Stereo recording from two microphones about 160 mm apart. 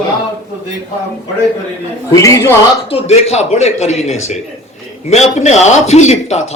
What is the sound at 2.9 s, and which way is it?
Speech, 40° left (ahead or behind).